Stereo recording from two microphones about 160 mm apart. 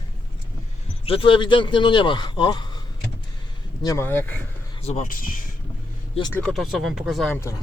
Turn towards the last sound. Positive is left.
turn(degrees=0)  # may be behind; listen again after turning